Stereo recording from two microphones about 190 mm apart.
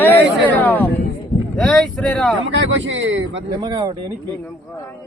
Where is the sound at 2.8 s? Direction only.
75° right (ahead or behind).